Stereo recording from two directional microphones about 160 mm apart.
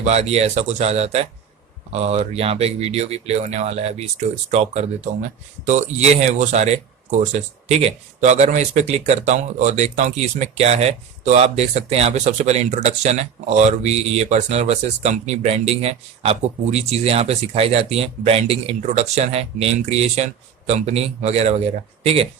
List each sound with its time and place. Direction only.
0.0 s speech: 40° right (ahead or behind)
5.1 s speech: 55° right (ahead or behind); by 22.3 s 40° right (ahead or behind)